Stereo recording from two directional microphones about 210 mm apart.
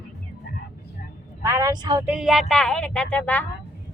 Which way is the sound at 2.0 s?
5° right (ahead or behind).